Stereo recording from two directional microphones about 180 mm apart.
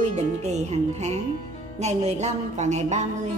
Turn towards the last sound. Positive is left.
turn(degrees=-40)  # may be behind; listen again after turning